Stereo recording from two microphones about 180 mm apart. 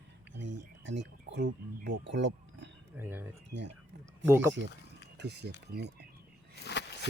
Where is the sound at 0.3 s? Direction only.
80° right.